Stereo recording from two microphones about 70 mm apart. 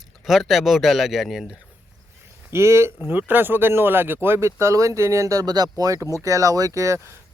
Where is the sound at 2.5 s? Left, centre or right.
Right.